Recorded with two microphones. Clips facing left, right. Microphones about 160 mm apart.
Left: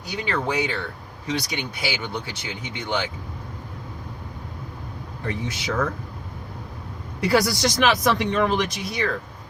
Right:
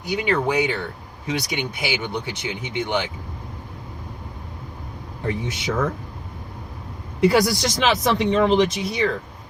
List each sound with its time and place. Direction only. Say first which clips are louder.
0.3 s speech: right 4 dB; 15° right (ahead or behind)
5.2 s speech: right 3 dB; 25° right (ahead or behind)
7.2 s speech: right 3 dB; 20° right (ahead or behind)